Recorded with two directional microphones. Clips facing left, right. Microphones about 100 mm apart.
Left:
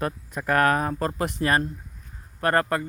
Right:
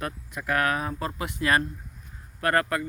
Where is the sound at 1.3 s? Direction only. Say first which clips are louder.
Right 2 dB; 35° left (ahead or behind).